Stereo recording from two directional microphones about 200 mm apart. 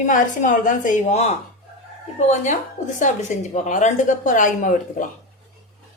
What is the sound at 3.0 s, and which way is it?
A woman's voice, 40° left (ahead or behind).